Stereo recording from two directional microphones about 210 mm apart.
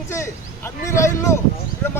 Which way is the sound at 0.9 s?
15° left (ahead or behind).